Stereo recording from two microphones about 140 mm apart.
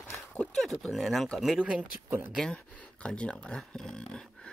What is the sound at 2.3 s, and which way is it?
Speech, 5° left (ahead or behind).